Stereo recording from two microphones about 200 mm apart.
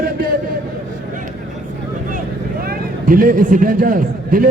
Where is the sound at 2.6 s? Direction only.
45° right (ahead or behind).